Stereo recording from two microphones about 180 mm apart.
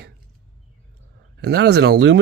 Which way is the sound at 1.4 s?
65° right (ahead or behind).